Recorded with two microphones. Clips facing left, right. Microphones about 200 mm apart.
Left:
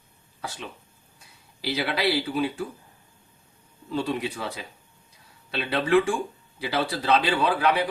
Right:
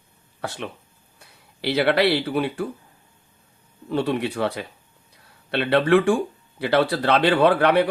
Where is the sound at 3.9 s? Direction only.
60° right (ahead or behind).